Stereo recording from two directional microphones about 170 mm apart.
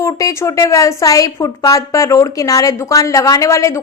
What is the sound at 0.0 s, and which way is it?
A woman's voice, 20° left (ahead or behind).